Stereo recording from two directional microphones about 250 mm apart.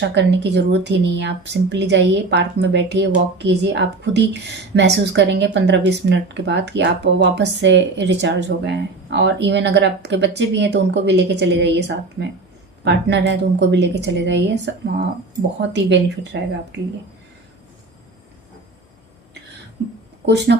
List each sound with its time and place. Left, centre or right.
0.1 s a woman's voice: right
15.7 s a woman's voice: right
20.2 s a woman's voice: right